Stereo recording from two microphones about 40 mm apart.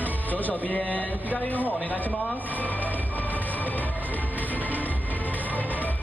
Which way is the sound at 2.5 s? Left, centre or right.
Left.